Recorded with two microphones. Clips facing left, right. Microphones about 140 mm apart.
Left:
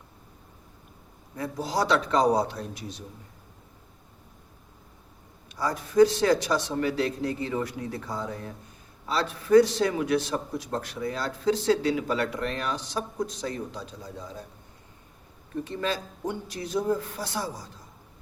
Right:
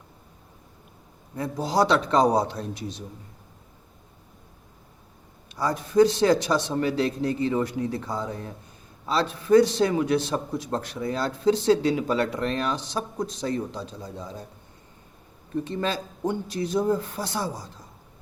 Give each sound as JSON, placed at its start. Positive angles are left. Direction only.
{"t": 1.4, "sound": "a man's voice", "side_deg": -25}
{"t": 5.5, "sound": "a man's voice", "side_deg": -25}
{"t": 15.6, "sound": "a man's voice", "side_deg": -30}